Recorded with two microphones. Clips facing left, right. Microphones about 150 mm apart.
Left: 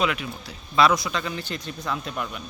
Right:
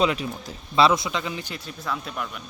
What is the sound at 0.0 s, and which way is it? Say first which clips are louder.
Speech: right 3 dB; 30° right (ahead or behind).